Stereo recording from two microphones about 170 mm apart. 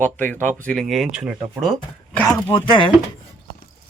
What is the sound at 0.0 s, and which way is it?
Speech, 10° left (ahead or behind).